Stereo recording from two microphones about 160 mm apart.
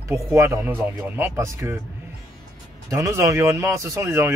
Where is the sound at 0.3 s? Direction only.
15° right (ahead or behind).